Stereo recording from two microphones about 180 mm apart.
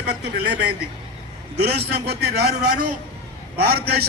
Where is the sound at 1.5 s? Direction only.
65° right (ahead or behind).